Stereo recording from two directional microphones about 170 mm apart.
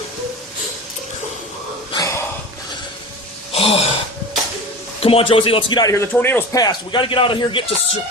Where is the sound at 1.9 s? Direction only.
20° left (ahead or behind).